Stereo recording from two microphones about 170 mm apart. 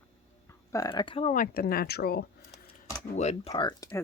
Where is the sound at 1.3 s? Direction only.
50° left (ahead or behind).